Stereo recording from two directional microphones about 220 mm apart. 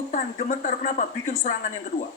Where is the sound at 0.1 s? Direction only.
35° left (ahead or behind).